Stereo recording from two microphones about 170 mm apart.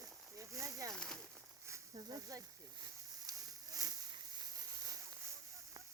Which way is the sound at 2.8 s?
20° right (ahead or behind).